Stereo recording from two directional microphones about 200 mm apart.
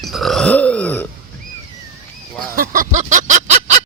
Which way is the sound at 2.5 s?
45° right (ahead or behind).